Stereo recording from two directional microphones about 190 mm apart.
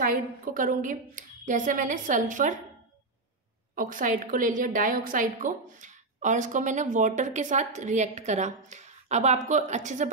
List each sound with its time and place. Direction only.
0.0 s a woman's voice: 50° right (ahead or behind)
3.7 s a woman's voice: 45° right (ahead or behind)